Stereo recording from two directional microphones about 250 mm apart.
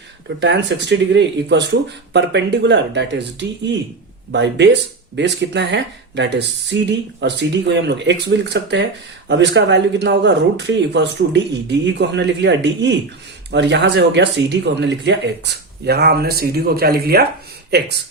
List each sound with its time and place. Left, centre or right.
0.3 s speech: right